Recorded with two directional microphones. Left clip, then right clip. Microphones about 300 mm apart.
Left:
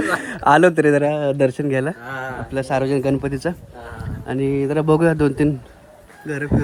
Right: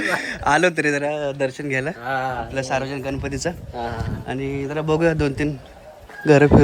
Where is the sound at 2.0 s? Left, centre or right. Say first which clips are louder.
Right 5 dB; centre.